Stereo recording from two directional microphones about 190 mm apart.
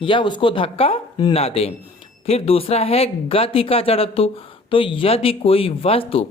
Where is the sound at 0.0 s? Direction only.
25° left (ahead or behind).